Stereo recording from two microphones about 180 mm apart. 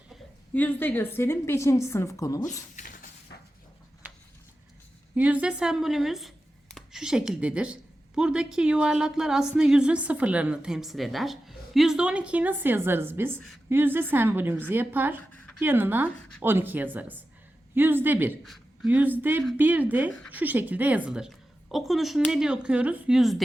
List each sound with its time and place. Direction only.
0.5 s a woman's voice: 10° left (ahead or behind)
2.7 s a sound: 45° left (ahead or behind)
5.1 s a woman's voice: 10° right (ahead or behind)
18.4 s a woman's voice: centre (ahead or behind)